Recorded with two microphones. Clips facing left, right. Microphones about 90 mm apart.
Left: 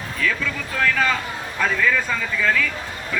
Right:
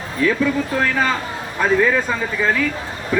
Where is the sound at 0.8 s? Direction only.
25° right (ahead or behind).